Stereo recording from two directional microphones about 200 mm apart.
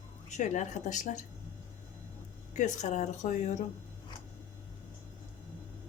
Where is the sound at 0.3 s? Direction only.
35° left (ahead or behind).